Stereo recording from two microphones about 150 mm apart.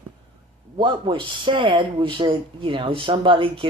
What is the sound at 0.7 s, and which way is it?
A woman's voice, 35° right (ahead or behind).